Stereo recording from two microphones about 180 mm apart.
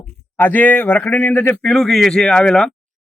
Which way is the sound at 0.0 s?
10° left (ahead or behind).